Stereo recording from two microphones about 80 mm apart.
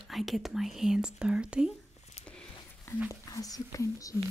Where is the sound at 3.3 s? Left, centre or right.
Left.